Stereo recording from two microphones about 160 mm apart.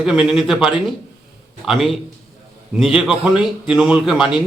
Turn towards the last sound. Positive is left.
turn(degrees=-5)  # may be behind; listen again after turning